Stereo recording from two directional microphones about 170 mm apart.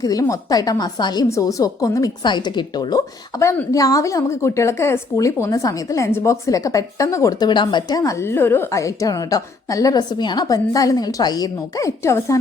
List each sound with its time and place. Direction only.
0.0 s a woman's voice: 20° left (ahead or behind)